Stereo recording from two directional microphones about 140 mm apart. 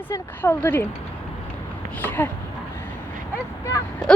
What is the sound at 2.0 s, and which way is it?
Speech, 15° left (ahead or behind).